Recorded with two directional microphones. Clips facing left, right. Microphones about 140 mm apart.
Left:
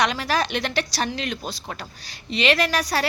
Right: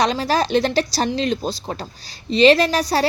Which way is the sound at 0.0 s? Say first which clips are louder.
Right 4 dB; 30° right (ahead or behind).